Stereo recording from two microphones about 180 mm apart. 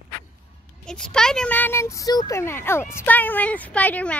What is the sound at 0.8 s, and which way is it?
Speech, 5° left (ahead or behind).